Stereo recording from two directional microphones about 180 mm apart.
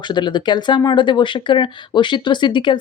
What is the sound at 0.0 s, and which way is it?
Speech, 25° left (ahead or behind).